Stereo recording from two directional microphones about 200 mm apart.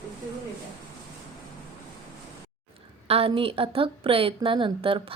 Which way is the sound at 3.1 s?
30° right (ahead or behind).